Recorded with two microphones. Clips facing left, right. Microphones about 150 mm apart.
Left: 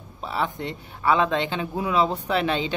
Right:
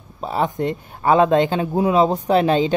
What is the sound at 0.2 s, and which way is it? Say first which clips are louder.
Speech: right 7 dB; 40° right (ahead or behind).